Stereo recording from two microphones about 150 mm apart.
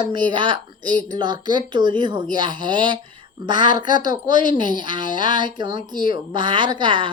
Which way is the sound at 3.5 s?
60° left (ahead or behind).